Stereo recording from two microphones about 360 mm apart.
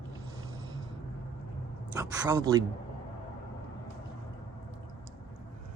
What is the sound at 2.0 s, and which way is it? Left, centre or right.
Speech, centre.